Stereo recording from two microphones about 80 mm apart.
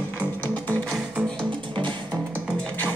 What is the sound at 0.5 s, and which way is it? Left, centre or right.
Music, left.